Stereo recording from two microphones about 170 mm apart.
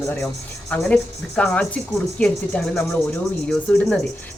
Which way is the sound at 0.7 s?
5° left (ahead or behind).